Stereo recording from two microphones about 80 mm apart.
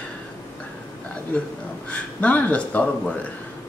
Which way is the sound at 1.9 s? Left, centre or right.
Centre.